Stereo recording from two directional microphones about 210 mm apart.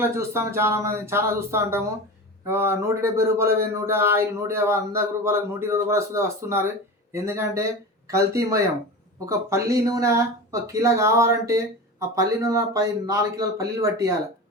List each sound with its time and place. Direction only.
0.0 s speech: 10° right (ahead or behind)